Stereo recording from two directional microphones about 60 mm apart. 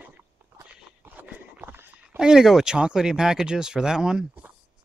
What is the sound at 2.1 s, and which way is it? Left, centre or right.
Speech, centre.